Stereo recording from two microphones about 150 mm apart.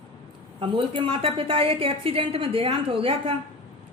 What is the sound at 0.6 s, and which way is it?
A woman's voice, 35° right (ahead or behind).